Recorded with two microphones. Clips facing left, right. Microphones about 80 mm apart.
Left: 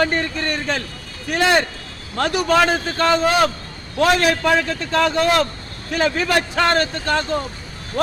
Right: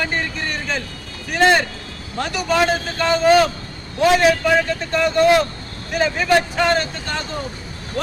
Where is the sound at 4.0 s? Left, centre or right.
Left.